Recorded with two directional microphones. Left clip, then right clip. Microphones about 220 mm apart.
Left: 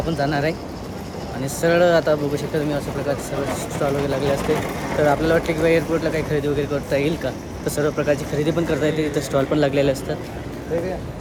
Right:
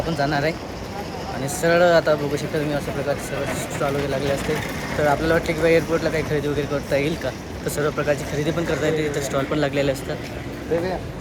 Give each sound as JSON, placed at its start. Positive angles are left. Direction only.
{"t": 0.2, "sound": "speech", "side_deg": 10}
{"t": 1.6, "sound": "speech", "side_deg": 10}
{"t": 4.9, "sound": "speech", "side_deg": 15}